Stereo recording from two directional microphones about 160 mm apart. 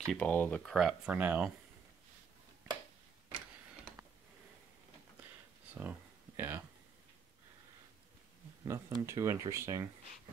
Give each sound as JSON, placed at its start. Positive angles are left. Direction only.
{"t": 0.0, "sound": "speech", "side_deg": 5}
{"t": 5.8, "sound": "a sound", "side_deg": -10}
{"t": 8.6, "sound": "speech", "side_deg": -20}